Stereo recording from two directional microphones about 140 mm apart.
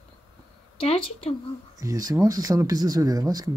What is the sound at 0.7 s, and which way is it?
Speech, 40° left (ahead or behind).